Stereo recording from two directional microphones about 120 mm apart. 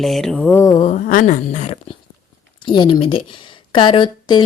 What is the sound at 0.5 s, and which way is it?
Mantra, 30° left (ahead or behind).